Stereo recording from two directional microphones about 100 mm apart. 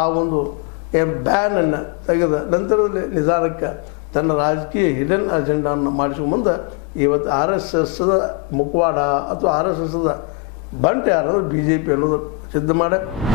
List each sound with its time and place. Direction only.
0.0 s a man's voice: 25° left (ahead or behind)